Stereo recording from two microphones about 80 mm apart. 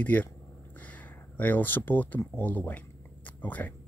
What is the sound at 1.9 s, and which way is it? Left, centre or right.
Speech, left.